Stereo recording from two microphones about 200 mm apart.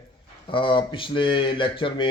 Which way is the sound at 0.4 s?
25° left (ahead or behind).